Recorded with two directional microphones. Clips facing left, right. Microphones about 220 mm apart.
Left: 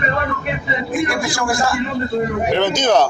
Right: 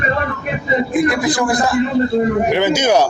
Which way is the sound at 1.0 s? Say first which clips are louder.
Right 4 dB; 20° right (ahead or behind).